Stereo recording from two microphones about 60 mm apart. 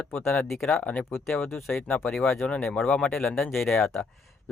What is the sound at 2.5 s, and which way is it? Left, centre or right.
Speech, centre.